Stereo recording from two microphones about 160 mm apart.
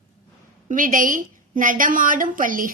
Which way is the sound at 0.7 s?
55° right (ahead or behind).